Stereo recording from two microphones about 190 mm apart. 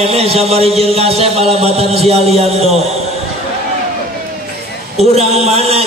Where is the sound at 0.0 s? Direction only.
30° right (ahead or behind).